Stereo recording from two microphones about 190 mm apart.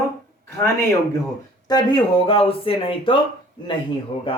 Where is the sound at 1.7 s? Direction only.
25° left (ahead or behind).